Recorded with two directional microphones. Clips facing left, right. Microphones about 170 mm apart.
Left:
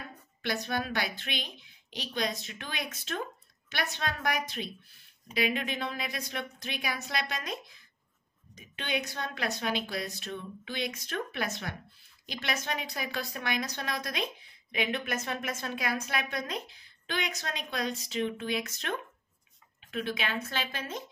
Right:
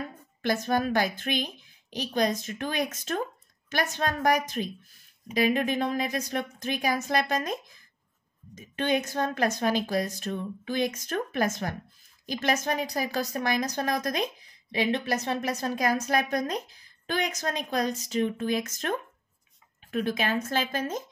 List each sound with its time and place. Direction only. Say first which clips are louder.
0.4 s speech: right 6 dB; 45° right (ahead or behind)